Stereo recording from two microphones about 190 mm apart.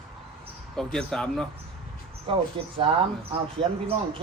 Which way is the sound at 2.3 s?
30° right (ahead or behind).